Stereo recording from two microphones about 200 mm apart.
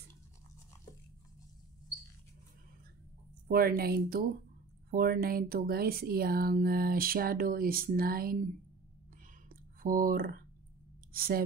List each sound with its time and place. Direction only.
3.4 s speech: 50° right (ahead or behind)
9.5 s a sound: 45° right (ahead or behind)
11.1 s speech: 50° right (ahead or behind)